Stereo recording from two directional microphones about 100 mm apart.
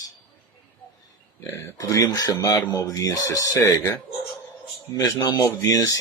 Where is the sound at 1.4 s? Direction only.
30° left (ahead or behind).